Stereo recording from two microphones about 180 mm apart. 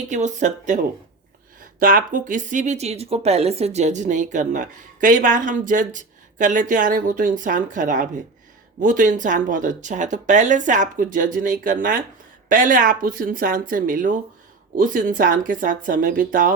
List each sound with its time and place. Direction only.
0.1 s speech: 40° right (ahead or behind)
1.8 s speech: 50° right (ahead or behind)